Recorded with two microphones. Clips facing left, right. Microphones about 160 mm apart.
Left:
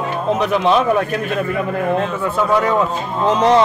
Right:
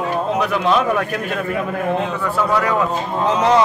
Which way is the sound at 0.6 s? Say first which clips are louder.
Left 3 dB; 30° left (ahead or behind).